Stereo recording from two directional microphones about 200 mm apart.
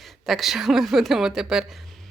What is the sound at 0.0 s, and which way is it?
A woman's voice, centre (ahead or behind).